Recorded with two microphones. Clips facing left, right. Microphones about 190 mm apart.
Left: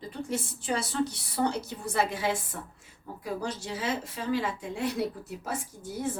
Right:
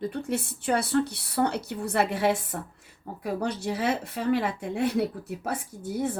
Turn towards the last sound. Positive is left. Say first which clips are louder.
# right 4 dB
turn(degrees=-60)  # may be behind; listen again after turning